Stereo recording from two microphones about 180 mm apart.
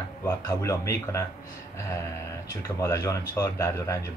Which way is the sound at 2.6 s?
15° left (ahead or behind).